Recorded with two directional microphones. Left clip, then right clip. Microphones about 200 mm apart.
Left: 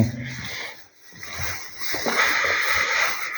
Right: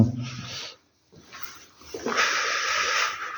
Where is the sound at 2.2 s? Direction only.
15° right (ahead or behind).